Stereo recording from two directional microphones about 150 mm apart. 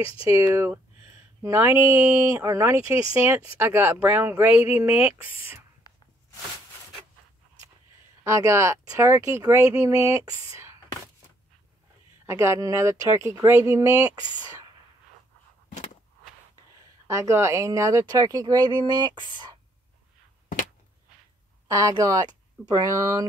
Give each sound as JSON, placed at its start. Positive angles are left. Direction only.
{"t": 0.2, "sound": "speech", "side_deg": -15}
{"t": 8.2, "sound": "speech", "side_deg": -20}
{"t": 12.3, "sound": "speech", "side_deg": -20}
{"t": 17.1, "sound": "speech", "side_deg": -20}
{"t": 21.6, "sound": "speech", "side_deg": -25}